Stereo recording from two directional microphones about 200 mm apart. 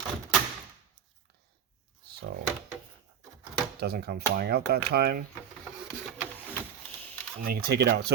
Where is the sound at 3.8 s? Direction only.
50° right (ahead or behind).